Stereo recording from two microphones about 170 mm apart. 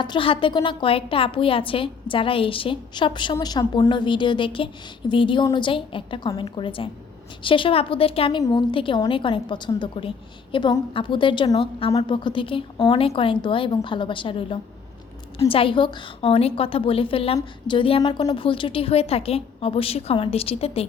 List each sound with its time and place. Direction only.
0.0 s a woman's voice: 30° left (ahead or behind)